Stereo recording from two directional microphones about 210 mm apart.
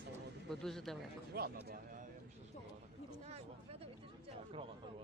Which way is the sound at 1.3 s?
50° right (ahead or behind).